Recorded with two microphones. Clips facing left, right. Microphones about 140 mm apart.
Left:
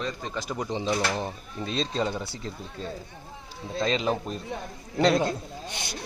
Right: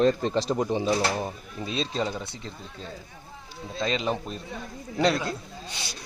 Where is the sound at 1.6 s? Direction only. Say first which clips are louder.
Left 1 dB; 5° right (ahead or behind).